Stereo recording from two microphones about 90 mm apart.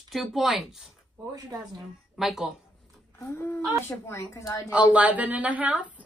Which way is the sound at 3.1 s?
25° left (ahead or behind).